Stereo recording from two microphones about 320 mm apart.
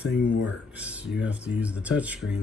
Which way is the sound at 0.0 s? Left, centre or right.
Left.